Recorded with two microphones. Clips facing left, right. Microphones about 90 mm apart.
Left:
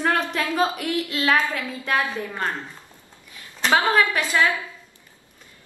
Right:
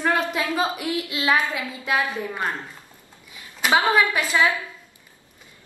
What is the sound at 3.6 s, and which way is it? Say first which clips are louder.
Speech: even; 15° right (ahead or behind).